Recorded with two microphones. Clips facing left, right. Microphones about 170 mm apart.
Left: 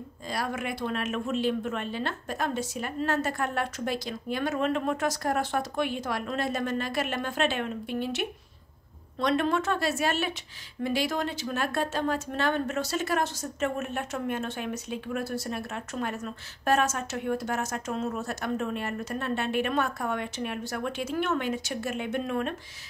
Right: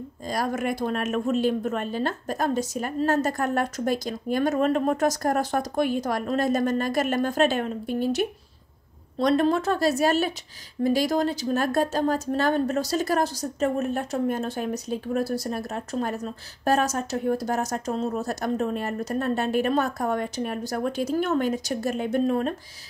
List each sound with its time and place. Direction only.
0.3 s a woman's voice: 40° right (ahead or behind)